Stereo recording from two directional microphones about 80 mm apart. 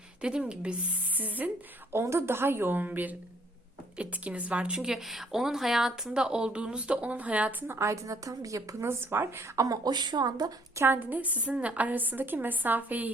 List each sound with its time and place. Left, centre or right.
0.2 s a woman's voice: centre
1.9 s a woman's voice: right; by 7.5 s centre
7.7 s a woman's voice: right
9.6 s speech: right
10.8 s a woman's voice: right
11.1 s a woman's voice: centre